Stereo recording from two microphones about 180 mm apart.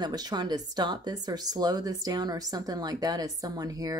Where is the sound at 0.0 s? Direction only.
25° right (ahead or behind).